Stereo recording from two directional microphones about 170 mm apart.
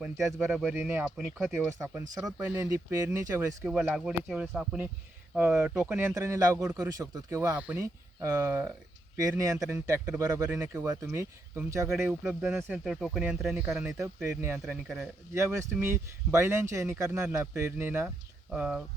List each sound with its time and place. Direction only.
0.0 s a man's voice: 5° right (ahead or behind)
11.9 s a man's voice: 5° right (ahead or behind)